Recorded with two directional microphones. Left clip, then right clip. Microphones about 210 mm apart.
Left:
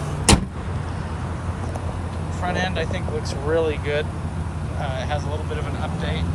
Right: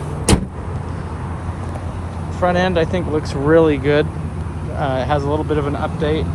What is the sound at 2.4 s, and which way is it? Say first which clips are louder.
Speech: right 9 dB; centre (ahead or behind).